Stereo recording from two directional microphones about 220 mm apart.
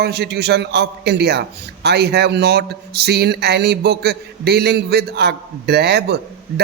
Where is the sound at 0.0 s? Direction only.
50° right (ahead or behind).